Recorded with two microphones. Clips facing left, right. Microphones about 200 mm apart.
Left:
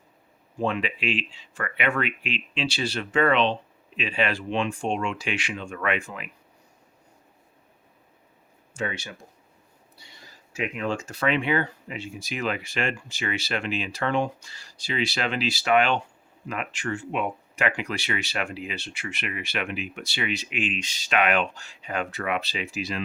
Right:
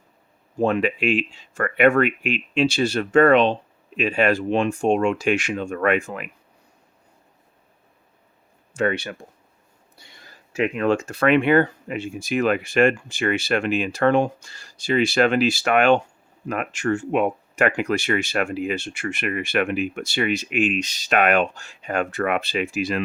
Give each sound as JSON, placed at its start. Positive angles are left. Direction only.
{"t": 0.6, "sound": "speech", "side_deg": -50}
{"t": 8.7, "sound": "speech", "side_deg": -60}